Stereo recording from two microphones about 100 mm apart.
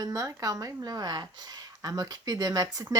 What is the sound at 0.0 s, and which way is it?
A woman's voice, 35° right (ahead or behind).